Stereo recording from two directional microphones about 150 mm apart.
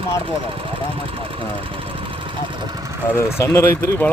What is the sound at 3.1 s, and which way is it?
Speech, 15° left (ahead or behind).